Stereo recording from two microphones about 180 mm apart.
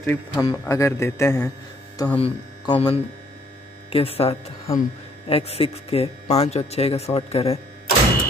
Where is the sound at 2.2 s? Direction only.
30° left (ahead or behind).